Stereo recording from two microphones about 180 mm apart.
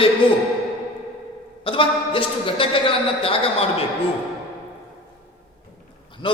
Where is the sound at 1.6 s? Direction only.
30° left (ahead or behind).